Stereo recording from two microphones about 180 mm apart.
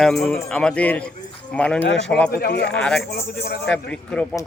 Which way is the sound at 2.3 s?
65° left (ahead or behind).